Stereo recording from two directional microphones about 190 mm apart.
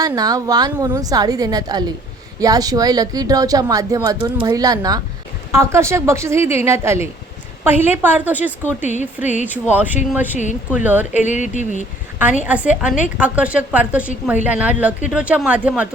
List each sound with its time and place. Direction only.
0.0 s a woman's voice: 20° right (ahead or behind)
8.8 s speech: 40° left (ahead or behind)
9.5 s speech: 10° right (ahead or behind)
11.1 s speech: 40° left (ahead or behind)
12.5 s speech: 5° right (ahead or behind)